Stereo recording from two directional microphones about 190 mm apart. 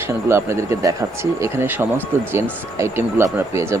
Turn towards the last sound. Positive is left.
turn(degrees=-15)  # may be behind; listen again after turning